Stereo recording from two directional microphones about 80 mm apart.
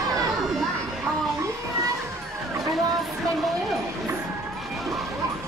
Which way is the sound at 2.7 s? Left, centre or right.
Centre.